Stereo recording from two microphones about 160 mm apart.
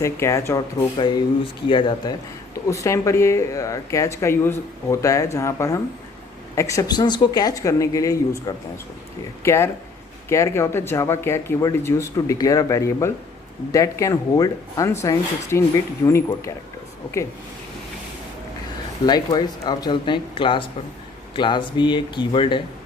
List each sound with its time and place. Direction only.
0.0 s speech: 20° left (ahead or behind)
2.6 s speech: 20° left (ahead or behind)
9.4 s speech: 15° left (ahead or behind)
19.0 s speech: 25° left (ahead or behind)